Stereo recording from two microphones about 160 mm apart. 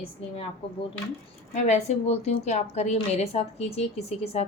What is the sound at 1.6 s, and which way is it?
A woman's voice, 45° left (ahead or behind).